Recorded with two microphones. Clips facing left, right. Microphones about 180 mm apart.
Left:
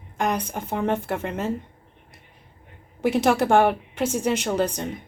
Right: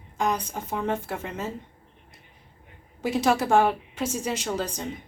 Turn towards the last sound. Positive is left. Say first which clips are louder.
# left 6 dB
turn(degrees=65)  # may be behind; listen again after turning